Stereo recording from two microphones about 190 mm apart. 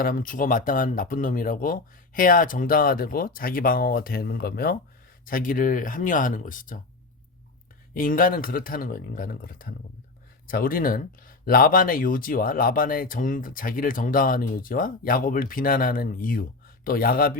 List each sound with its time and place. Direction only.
0.0 s speech: 45° left (ahead or behind)
7.9 s speech: 45° left (ahead or behind)